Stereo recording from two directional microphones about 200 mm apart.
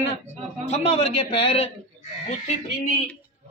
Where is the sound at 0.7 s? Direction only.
30° left (ahead or behind).